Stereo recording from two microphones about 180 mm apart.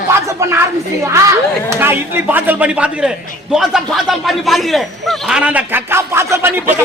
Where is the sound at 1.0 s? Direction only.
15° right (ahead or behind).